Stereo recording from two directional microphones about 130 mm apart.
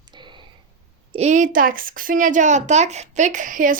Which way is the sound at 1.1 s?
60° right (ahead or behind).